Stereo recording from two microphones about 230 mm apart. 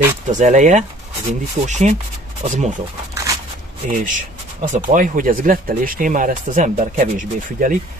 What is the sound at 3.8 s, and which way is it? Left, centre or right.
Speech, right.